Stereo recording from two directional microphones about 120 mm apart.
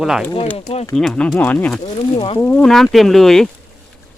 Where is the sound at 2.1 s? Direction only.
50° left (ahead or behind).